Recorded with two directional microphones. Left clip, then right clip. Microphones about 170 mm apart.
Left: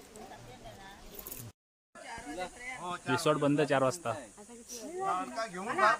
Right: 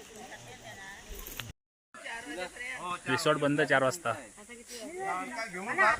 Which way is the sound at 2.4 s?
50° left (ahead or behind).